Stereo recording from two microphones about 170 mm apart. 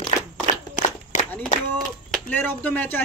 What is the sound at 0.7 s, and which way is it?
Shuffling cards, 45° left (ahead or behind).